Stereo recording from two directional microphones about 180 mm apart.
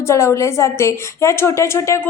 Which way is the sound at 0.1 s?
15° left (ahead or behind).